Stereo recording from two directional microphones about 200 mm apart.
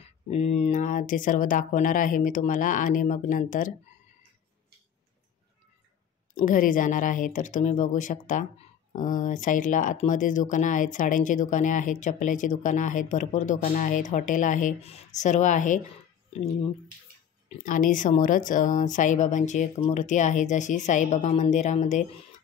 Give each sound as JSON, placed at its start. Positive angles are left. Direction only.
{"t": 0.0, "sound": "speech", "side_deg": 30}
{"t": 6.4, "sound": "speech", "side_deg": 40}
{"t": 17.6, "sound": "speech", "side_deg": 40}